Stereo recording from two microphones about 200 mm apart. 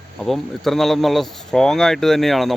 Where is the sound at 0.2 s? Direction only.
Centre (ahead or behind).